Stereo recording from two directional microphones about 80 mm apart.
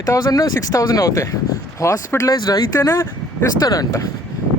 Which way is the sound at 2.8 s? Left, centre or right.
Left.